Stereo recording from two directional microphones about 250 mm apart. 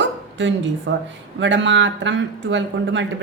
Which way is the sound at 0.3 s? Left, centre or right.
Right.